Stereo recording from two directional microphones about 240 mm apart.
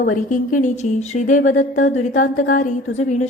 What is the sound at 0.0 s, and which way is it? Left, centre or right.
A woman's voice, left.